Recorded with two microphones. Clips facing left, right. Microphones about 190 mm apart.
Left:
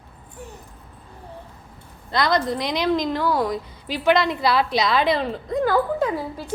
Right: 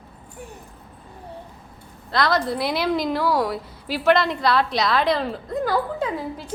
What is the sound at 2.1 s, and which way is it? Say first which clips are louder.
A woman's voice: even; centre (ahead or behind).